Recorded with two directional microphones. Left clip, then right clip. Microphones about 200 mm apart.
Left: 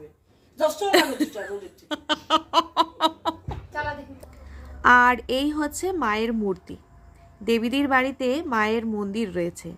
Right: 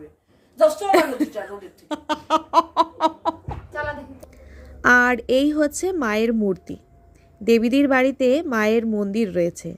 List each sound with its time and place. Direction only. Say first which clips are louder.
0.9 s speech: right 3 dB; 5° right (ahead or behind)
1.9 s laughter: right 1 dB; 10° right (ahead or behind)
4.8 s a woman's voice: even; 20° right (ahead or behind)